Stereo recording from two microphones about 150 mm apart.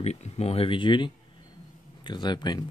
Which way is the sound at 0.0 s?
45° left (ahead or behind).